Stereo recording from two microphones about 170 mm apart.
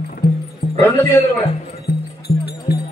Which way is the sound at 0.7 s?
10° left (ahead or behind).